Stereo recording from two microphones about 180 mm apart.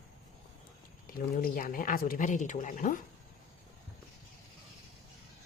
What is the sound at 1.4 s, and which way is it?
Speech, 50° left (ahead or behind).